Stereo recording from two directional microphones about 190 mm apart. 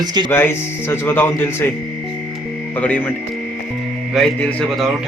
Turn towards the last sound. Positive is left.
turn(degrees=0)  # may be behind; listen again after turning